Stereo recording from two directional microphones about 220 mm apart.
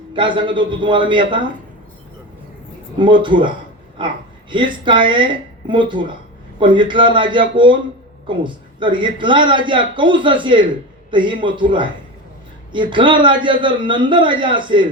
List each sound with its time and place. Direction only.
0.1 s a man's voice: 20° right (ahead or behind)
3.0 s a man's voice: 20° right (ahead or behind)